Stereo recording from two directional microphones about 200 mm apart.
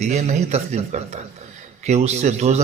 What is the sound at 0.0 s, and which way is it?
Speech, 35° right (ahead or behind).